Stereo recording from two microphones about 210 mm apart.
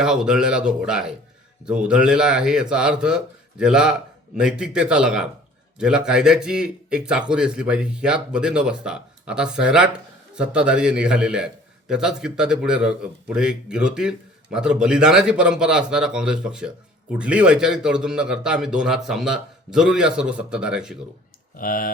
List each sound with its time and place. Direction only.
0.0 s speech: 5° right (ahead or behind)
21.5 s speech: 40° left (ahead or behind)